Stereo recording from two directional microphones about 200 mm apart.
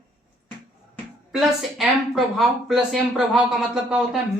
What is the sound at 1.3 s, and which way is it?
Speech, centre (ahead or behind).